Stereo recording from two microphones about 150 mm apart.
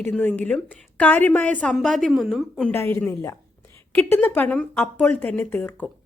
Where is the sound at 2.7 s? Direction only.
15° left (ahead or behind).